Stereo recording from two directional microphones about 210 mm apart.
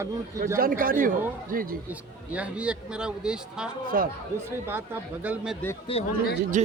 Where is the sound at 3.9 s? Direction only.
45° right (ahead or behind).